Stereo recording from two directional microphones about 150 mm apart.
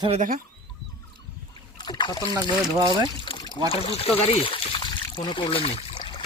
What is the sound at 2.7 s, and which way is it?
Speech, 25° right (ahead or behind).